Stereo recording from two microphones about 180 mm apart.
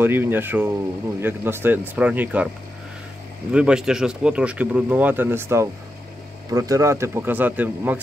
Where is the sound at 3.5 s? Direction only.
5° right (ahead or behind).